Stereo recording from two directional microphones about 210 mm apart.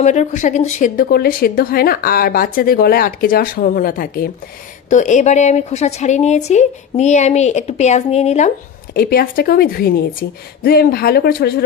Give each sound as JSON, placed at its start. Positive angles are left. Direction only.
{"t": 0.0, "sound": "a woman's voice", "side_deg": 35}
{"t": 8.9, "sound": "a woman's voice", "side_deg": 45}